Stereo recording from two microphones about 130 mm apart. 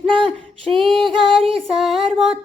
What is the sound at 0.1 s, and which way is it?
Female singing, 40° right (ahead or behind).